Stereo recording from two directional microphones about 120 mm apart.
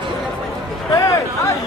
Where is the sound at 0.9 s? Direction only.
25° left (ahead or behind).